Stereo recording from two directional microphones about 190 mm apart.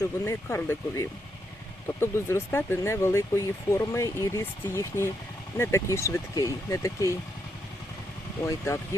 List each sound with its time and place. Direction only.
0.0 s speech: 15° left (ahead or behind)
8.4 s speech: 15° left (ahead or behind)